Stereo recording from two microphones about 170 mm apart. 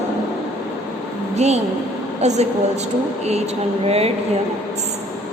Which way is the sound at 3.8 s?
35° right (ahead or behind).